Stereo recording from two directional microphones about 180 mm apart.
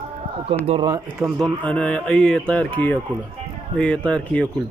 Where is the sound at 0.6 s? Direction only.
30° right (ahead or behind).